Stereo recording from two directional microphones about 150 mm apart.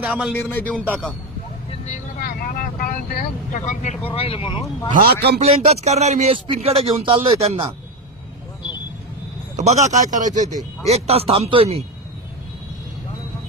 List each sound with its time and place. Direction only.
0.0 s speech: 10° right (ahead or behind)
0.3 s speech: 15° left (ahead or behind)
2.1 s vehicle: 70° left (ahead or behind)
3.5 s speech: 50° left (ahead or behind)
4.0 s speech: 40° left (ahead or behind)
4.9 s a man's voice: 85° right
5.4 s speech: 45° right (ahead or behind)
9.6 s a man's voice: 50° right (ahead or behind)
10.9 s speech: 40° right (ahead or behind)